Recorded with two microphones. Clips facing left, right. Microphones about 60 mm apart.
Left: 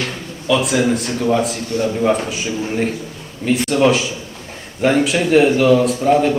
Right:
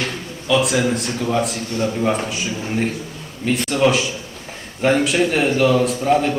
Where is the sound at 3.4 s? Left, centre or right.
Centre.